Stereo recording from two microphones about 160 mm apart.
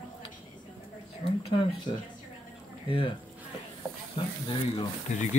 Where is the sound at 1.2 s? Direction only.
35° left (ahead or behind).